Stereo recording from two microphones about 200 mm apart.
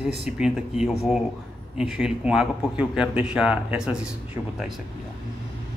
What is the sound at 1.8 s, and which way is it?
Speech, 5° right (ahead or behind).